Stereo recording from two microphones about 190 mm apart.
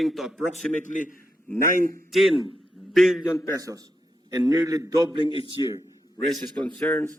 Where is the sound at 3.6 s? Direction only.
20° right (ahead or behind).